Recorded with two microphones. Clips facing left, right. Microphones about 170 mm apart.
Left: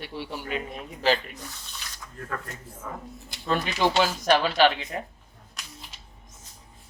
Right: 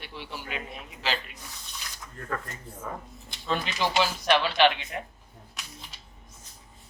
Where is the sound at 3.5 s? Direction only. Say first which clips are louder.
Left 4 dB; 50° left (ahead or behind).